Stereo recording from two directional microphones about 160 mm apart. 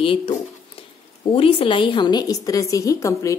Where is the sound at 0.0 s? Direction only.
35° left (ahead or behind).